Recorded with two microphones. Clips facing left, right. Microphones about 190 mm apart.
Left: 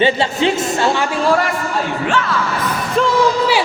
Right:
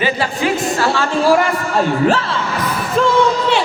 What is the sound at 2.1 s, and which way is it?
Speech, 35° right (ahead or behind).